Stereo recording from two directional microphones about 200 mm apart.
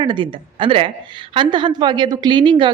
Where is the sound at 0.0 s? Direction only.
25° right (ahead or behind).